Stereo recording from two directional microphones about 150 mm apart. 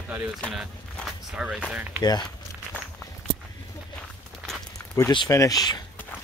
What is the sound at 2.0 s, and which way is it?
Speech, 25° left (ahead or behind).